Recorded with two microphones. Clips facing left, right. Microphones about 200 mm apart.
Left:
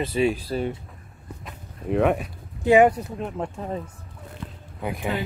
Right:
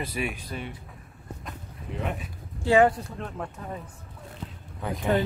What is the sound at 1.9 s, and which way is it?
Speech, 65° left (ahead or behind).